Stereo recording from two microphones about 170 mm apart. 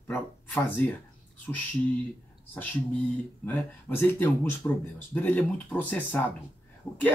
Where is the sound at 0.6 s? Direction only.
10° left (ahead or behind).